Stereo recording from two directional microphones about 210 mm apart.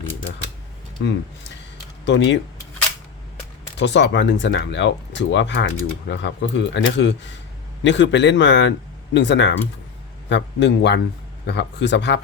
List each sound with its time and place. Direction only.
1.0 s speech: 55° left (ahead or behind)
3.8 s speech: 55° left (ahead or behind)